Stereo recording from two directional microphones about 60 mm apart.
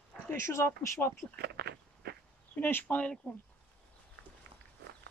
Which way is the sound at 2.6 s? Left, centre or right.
Left.